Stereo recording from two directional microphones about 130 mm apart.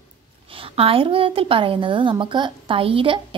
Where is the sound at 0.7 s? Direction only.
45° right (ahead or behind).